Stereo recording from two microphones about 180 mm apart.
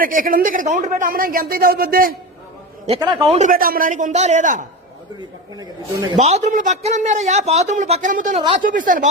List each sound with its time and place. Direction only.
0.0 s speech: 50° right (ahead or behind)
3.3 s speech: 45° right (ahead or behind)
5.5 s speech: 20° right (ahead or behind)
6.1 s speech: 40° right (ahead or behind)